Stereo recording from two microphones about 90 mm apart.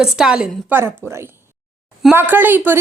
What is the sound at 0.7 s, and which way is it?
Speech, 25° right (ahead or behind).